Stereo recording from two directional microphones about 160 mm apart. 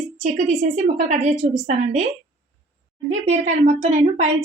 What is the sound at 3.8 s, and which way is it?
Speech, 45° right (ahead or behind).